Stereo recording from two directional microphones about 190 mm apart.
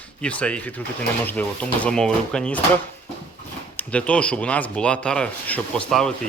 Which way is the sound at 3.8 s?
5° left (ahead or behind).